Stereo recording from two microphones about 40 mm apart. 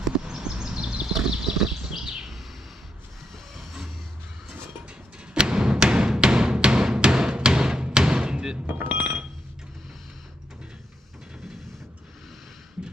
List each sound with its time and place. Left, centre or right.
0.0 s a sound: centre
3.3 s vehicle: centre
4.4 s music: right
8.6 s chink: right